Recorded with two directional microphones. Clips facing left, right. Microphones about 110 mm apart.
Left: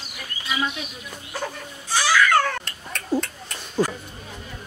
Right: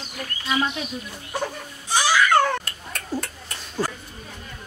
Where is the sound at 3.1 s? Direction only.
15° left (ahead or behind).